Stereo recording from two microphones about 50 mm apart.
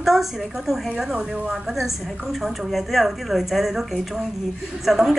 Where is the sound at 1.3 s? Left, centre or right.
Right.